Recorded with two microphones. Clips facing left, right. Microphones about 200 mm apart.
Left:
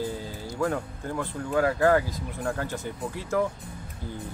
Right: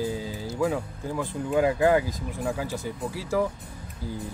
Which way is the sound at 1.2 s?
15° right (ahead or behind).